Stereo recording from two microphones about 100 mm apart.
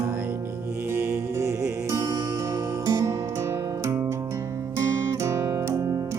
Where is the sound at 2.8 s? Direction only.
40° right (ahead or behind).